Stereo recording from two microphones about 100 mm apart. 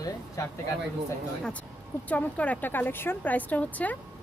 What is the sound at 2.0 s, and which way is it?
A woman's voice, 15° left (ahead or behind).